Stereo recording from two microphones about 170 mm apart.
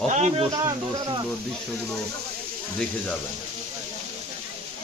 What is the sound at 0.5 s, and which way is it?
Speech, 25° right (ahead or behind).